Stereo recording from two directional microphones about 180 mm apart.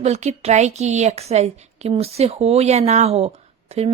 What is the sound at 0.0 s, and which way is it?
A woman's voice, 40° right (ahead or behind).